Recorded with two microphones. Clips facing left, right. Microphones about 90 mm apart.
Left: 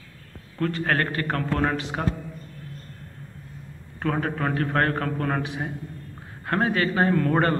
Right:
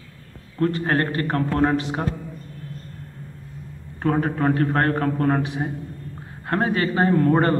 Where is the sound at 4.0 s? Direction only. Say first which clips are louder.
Right 5 dB; 30° right (ahead or behind).